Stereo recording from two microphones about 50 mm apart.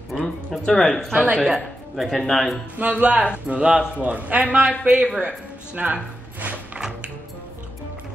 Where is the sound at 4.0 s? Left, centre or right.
Right.